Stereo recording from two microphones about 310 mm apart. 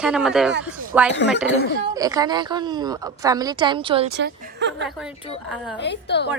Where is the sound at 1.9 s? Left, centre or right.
Centre.